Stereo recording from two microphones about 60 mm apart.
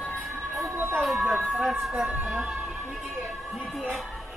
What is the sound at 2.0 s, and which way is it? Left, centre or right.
Music, right.